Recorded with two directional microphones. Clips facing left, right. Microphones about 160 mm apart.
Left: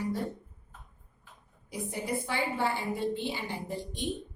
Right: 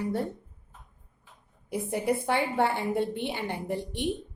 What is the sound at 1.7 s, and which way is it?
A woman's voice, 60° right (ahead or behind).